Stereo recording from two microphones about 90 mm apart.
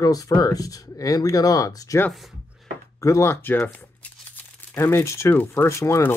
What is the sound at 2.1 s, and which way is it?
Speech, centre (ahead or behind).